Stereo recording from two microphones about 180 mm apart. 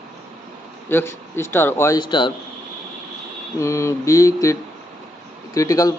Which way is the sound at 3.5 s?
15° left (ahead or behind).